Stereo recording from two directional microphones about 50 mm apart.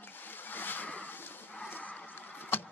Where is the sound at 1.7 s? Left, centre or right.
Left.